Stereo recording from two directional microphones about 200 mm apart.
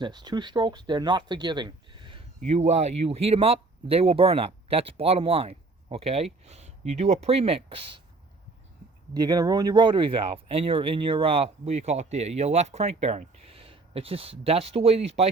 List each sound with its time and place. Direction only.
0.0 s speech: 20° right (ahead or behind)
2.5 s speech: 35° right (ahead or behind)
9.1 s speech: 20° right (ahead or behind)